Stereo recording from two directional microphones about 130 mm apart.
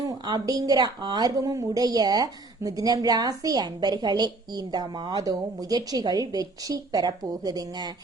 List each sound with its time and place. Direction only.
0.1 s a woman's voice: 30° right (ahead or behind)